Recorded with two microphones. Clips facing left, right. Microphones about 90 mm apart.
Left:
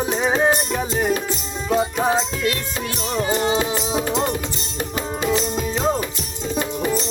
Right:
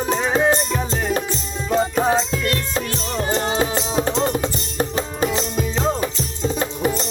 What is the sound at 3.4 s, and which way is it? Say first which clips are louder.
Music: even; 35° right (ahead or behind).